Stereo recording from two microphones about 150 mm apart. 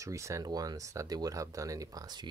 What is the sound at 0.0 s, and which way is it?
Speech, 20° right (ahead or behind).